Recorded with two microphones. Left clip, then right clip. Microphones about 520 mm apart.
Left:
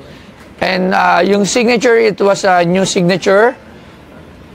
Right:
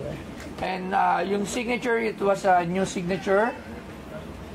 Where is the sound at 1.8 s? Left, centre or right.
Left.